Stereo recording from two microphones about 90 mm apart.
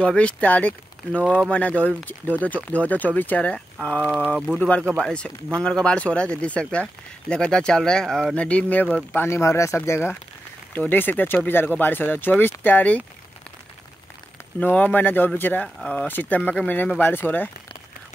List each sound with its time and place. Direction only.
0.0 s speech: 15° left (ahead or behind)
14.6 s speech: 15° left (ahead or behind)